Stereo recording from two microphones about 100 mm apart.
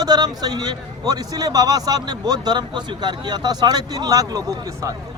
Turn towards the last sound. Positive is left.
turn(degrees=-35)  # may be behind; listen again after turning